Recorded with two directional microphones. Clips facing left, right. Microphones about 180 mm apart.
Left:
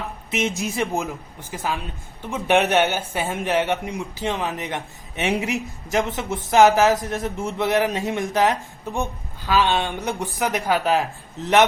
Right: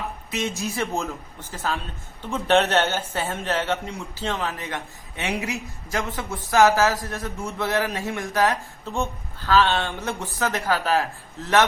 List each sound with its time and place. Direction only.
0.3 s speech: 20° left (ahead or behind)